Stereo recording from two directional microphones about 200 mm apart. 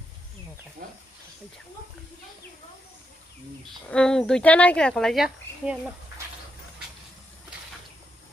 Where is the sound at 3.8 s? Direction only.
5° left (ahead or behind).